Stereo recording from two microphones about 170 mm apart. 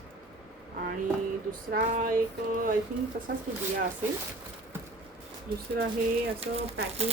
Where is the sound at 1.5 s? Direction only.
55° right (ahead or behind).